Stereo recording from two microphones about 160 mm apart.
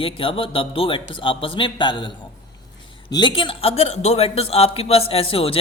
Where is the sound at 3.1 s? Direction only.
30° left (ahead or behind).